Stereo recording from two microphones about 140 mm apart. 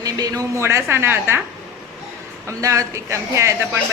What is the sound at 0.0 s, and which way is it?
A woman's voice, 25° right (ahead or behind).